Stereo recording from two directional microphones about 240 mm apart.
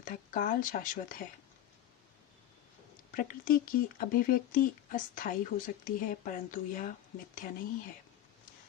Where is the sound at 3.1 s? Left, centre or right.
Left.